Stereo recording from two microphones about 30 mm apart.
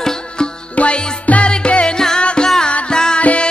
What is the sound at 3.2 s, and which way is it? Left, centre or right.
Music, left.